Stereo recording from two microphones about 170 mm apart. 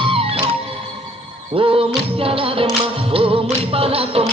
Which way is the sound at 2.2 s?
35° right (ahead or behind).